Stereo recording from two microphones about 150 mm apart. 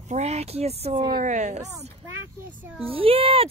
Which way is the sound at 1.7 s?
15° right (ahead or behind).